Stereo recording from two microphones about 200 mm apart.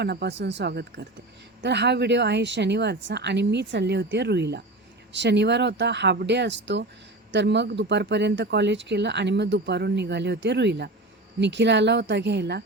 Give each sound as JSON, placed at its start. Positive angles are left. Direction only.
{"t": 0.0, "sound": "speech", "side_deg": -55}